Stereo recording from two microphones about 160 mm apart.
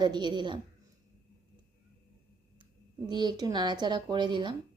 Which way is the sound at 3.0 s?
25° right (ahead or behind).